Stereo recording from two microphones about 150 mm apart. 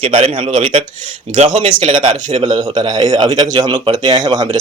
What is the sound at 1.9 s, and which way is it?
Speech, 35° right (ahead or behind).